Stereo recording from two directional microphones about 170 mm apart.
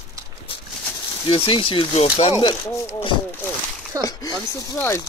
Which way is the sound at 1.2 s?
30° left (ahead or behind).